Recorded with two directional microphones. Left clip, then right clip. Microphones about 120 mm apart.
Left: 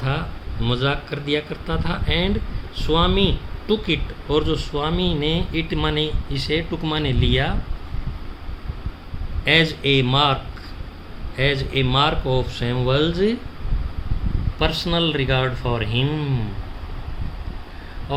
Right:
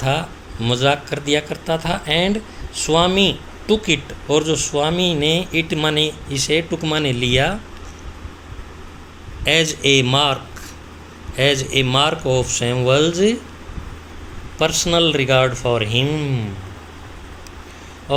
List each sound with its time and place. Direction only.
0.0 s speech: 25° right (ahead or behind)
9.4 s speech: 25° right (ahead or behind)
11.3 s speech: 25° right (ahead or behind)
14.6 s speech: 25° right (ahead or behind)